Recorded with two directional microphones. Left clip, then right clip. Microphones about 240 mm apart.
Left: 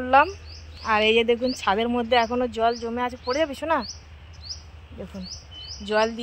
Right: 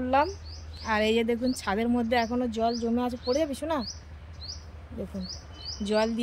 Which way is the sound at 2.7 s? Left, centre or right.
Left.